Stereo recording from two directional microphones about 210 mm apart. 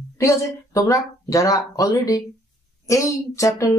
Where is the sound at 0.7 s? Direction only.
15° left (ahead or behind).